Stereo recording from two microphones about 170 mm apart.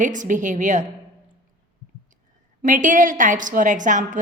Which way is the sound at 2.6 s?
50° right (ahead or behind).